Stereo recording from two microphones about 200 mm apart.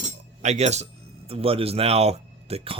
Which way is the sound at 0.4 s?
35° right (ahead or behind).